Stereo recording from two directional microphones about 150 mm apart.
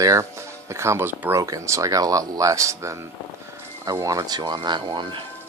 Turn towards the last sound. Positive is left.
turn(degrees=-30)  # may be behind; listen again after turning